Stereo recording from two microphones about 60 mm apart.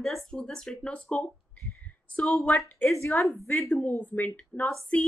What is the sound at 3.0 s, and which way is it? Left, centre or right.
Speech, left.